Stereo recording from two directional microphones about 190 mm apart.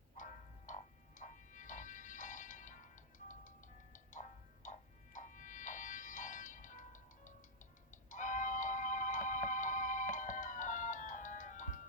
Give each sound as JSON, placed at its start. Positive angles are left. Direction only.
{"t": 0.2, "sound": "music", "side_deg": 40}